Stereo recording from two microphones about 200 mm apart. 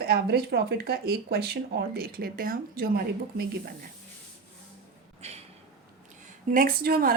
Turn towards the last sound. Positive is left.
turn(degrees=-45)  # may be behind; listen again after turning